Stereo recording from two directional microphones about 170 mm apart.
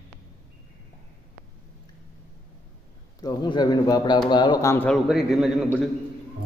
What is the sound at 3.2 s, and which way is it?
A man's voice, 25° left (ahead or behind).